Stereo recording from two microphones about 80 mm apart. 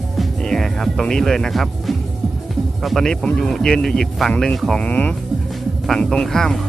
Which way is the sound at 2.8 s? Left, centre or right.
Centre.